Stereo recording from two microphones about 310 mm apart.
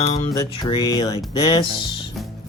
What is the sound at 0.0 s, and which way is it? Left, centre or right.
Music, left.